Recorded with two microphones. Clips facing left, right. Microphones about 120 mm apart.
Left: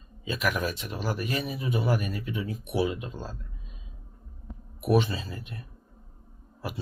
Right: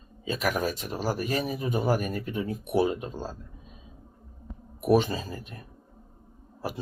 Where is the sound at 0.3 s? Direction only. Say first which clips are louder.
Right 1 dB; 40° right (ahead or behind).